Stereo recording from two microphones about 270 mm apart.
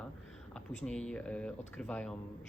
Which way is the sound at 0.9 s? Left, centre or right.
Centre.